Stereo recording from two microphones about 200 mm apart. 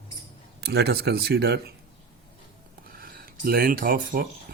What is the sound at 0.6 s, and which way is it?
Speech, 55° right (ahead or behind).